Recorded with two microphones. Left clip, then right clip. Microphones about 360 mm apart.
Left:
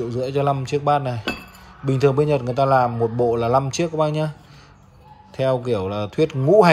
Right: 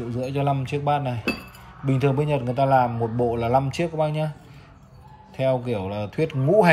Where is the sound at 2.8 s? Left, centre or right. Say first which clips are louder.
Left 3 dB; left.